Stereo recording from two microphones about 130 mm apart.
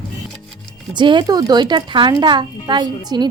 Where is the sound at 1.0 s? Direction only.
35° right (ahead or behind).